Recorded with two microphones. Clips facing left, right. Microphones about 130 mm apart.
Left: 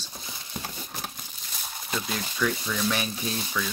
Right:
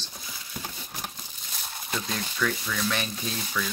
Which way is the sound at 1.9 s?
5° left (ahead or behind).